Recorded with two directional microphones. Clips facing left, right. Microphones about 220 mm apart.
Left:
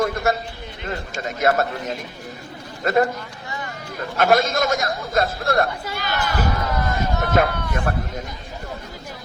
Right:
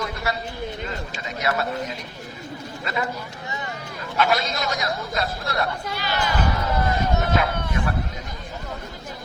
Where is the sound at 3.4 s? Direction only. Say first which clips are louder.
Left 1 dB; 20° right (ahead or behind).